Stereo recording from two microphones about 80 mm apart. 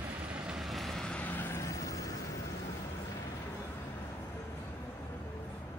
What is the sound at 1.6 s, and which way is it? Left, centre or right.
Vehicle, left.